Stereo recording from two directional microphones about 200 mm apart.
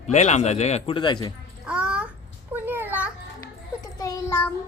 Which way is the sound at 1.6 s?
5° right (ahead or behind).